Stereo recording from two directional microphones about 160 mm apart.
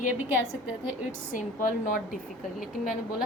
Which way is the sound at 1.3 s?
55° left (ahead or behind).